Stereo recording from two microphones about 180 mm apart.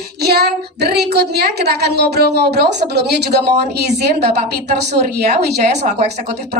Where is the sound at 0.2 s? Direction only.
65° right (ahead or behind).